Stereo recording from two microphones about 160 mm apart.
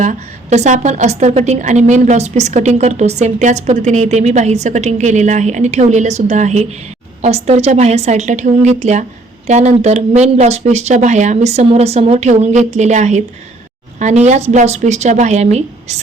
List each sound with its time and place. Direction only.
0.0 s a woman's voice: 50° right (ahead or behind)